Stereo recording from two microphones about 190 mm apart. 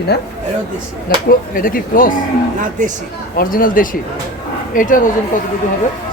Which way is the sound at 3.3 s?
50° left (ahead or behind).